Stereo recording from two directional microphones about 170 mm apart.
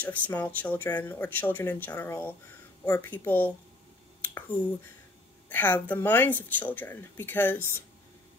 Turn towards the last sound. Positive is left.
turn(degrees=10)  # may be behind; listen again after turning